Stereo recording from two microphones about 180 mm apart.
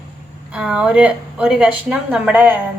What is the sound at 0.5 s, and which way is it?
A woman's voice, 5° right (ahead or behind).